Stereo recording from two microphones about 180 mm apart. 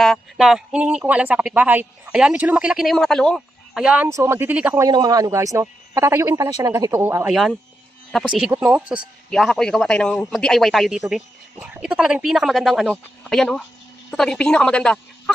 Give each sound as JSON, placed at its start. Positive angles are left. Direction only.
{"t": 0.0, "sound": "speech", "side_deg": 0}
{"t": 4.8, "sound": "speech", "side_deg": -20}
{"t": 8.1, "sound": "a man's voice", "side_deg": 0}